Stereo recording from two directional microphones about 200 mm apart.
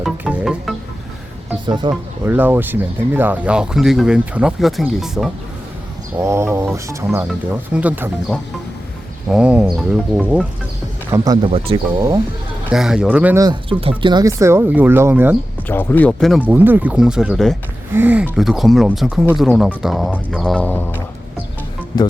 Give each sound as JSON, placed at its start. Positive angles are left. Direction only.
{"t": 0.0, "sound": "music", "side_deg": -5}
{"t": 1.6, "sound": "speech", "side_deg": -20}
{"t": 2.2, "sound": "speech", "side_deg": -10}
{"t": 6.1, "sound": "speech", "side_deg": -15}
{"t": 9.3, "sound": "speech", "side_deg": -5}
{"t": 11.5, "sound": "speech", "side_deg": -25}
{"t": 12.7, "sound": "speech", "side_deg": -5}
{"t": 13.4, "sound": "speech", "side_deg": -25}
{"t": 15.6, "sound": "speech", "side_deg": 10}
{"t": 16.5, "sound": "speech", "side_deg": -10}